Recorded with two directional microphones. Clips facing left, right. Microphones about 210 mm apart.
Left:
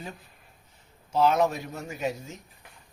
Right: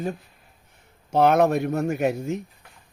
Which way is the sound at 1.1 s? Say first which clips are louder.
Right 5 dB; 60° right (ahead or behind).